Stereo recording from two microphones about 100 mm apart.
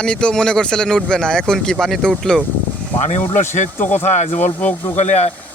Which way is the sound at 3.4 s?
20° left (ahead or behind).